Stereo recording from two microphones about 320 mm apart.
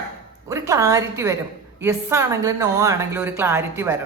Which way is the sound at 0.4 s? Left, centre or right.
Centre.